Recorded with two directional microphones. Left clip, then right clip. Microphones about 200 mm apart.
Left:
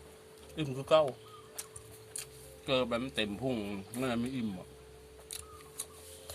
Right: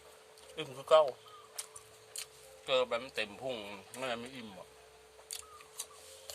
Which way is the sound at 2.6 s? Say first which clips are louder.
Even; 5° right (ahead or behind).